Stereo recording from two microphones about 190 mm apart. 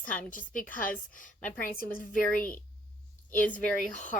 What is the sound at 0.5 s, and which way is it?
Speech, 45° left (ahead or behind).